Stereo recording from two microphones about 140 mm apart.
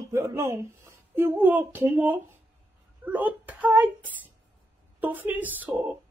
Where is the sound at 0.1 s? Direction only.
20° right (ahead or behind).